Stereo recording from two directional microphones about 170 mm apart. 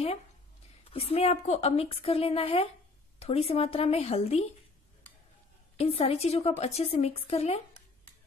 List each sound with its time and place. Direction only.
0.8 s a woman's voice: 35° left (ahead or behind)
5.8 s a woman's voice: 35° left (ahead or behind)